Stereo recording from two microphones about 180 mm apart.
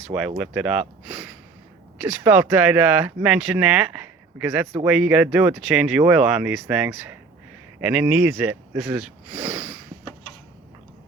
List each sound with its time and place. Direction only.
0.0 s speech: 5° right (ahead or behind)